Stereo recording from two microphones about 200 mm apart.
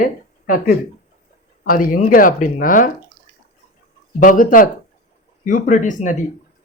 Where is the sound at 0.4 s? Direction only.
45° left (ahead or behind).